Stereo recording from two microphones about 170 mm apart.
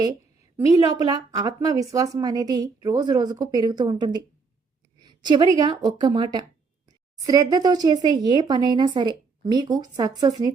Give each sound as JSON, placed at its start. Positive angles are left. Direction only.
{"t": 0.5, "sound": "a woman's voice", "side_deg": -20}